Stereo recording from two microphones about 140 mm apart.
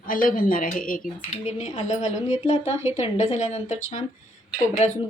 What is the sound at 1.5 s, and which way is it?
A woman's voice, 55° left (ahead or behind).